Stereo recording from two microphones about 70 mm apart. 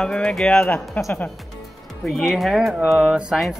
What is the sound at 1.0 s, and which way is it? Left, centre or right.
Speech, left.